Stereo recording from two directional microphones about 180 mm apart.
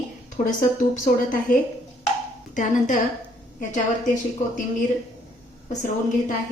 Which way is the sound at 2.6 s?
45° left (ahead or behind).